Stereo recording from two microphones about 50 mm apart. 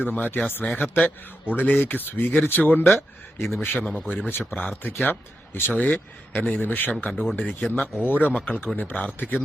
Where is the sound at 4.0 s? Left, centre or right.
Centre.